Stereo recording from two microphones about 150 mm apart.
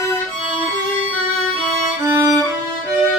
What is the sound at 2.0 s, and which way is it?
Violin, 15° right (ahead or behind).